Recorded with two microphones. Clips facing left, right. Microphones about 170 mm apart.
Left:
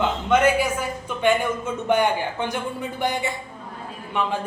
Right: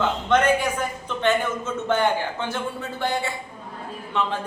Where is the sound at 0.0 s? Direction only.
10° left (ahead or behind).